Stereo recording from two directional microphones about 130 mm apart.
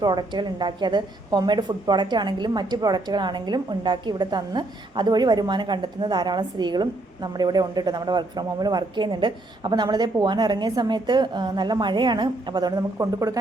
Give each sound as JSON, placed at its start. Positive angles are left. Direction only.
{"t": 0.0, "sound": "a woman's voice", "side_deg": -30}